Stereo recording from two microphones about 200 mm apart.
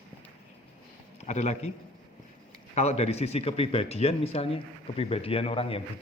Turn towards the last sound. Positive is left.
turn(degrees=30)  # may be behind; listen again after turning